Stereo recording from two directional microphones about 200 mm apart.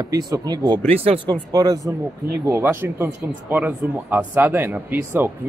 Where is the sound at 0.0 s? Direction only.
20° right (ahead or behind).